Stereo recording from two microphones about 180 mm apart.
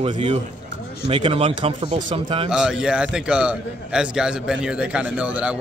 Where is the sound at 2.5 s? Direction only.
5° right (ahead or behind).